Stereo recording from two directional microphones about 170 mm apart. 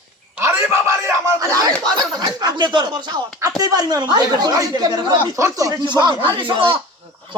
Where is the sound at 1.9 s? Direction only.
25° right (ahead or behind).